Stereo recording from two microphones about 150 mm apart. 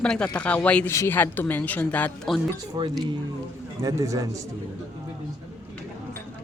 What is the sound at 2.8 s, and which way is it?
A man's voice, 30° right (ahead or behind).